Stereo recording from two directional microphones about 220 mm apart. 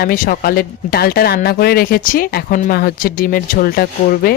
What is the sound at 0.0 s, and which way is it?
Speech, 40° left (ahead or behind).